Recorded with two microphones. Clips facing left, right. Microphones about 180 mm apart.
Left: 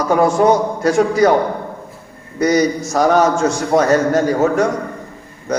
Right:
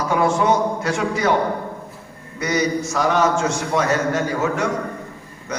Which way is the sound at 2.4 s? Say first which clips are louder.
Left 6 dB; 40° left (ahead or behind).